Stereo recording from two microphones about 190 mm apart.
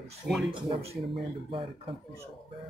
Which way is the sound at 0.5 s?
30° right (ahead or behind).